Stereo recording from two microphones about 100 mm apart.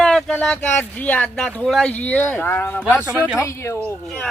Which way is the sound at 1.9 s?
15° left (ahead or behind).